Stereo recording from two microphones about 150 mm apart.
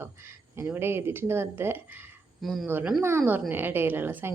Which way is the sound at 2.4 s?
Centre (ahead or behind).